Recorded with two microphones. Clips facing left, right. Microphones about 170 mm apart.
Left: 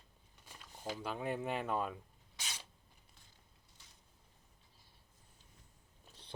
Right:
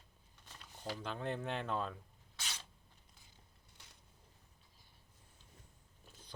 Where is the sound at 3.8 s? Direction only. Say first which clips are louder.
Right 4 dB; 65° right (ahead or behind).